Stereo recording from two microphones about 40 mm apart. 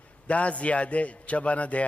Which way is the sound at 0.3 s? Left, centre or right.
Left.